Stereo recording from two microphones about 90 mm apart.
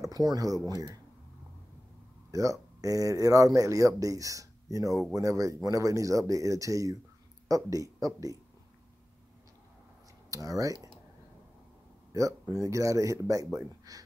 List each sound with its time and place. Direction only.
0.0 s speech: 45° right (ahead or behind)
2.3 s speech: 40° right (ahead or behind)
10.3 s speech: 40° right (ahead or behind)
12.1 s speech: 40° right (ahead or behind)